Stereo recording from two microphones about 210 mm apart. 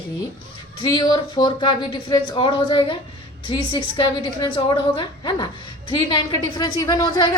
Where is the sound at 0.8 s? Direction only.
20° left (ahead or behind).